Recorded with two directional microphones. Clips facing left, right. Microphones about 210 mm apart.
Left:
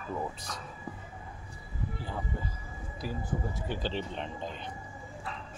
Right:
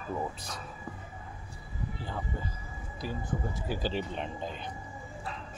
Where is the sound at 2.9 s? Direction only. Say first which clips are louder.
Even; centre (ahead or behind).